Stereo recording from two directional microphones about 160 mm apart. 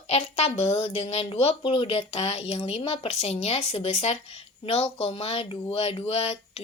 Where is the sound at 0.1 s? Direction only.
40° left (ahead or behind).